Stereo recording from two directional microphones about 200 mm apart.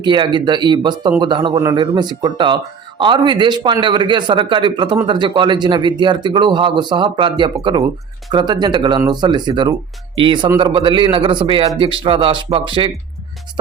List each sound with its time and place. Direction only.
0.0 s speech: 20° right (ahead or behind)